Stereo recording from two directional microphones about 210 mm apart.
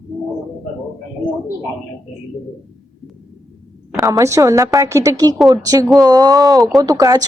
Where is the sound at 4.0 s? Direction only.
15° right (ahead or behind).